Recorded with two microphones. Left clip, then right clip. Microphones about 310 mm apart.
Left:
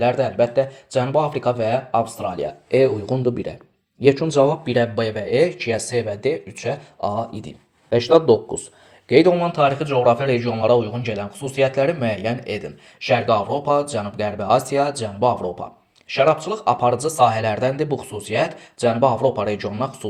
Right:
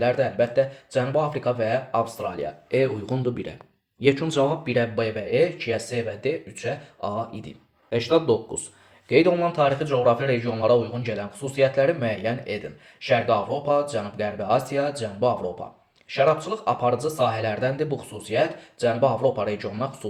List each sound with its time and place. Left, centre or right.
0.0 s speech: left